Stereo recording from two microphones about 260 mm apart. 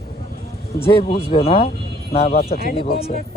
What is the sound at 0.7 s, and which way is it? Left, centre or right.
Speech, left.